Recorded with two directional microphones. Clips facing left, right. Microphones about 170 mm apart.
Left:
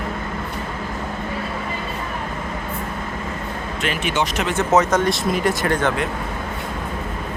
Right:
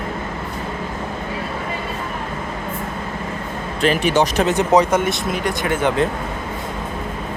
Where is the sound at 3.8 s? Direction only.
35° right (ahead or behind).